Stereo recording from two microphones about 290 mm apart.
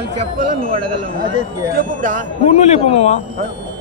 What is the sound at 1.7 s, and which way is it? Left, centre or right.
Speech, right.